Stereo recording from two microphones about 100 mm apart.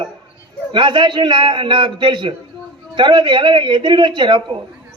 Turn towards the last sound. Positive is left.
turn(degrees=-55)  # may be behind; listen again after turning